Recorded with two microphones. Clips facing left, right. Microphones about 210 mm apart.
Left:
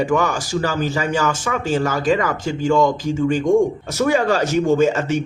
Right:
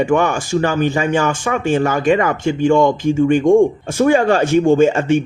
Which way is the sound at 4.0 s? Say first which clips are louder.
Right 4 dB; 55° right (ahead or behind).